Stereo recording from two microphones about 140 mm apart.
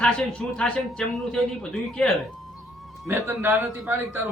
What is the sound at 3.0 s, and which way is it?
Speech, 15° right (ahead or behind).